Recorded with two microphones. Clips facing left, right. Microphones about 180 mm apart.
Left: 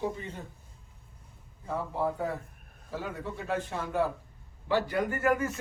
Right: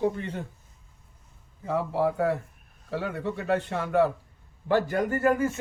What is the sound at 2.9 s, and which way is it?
A man's voice, 70° right (ahead or behind).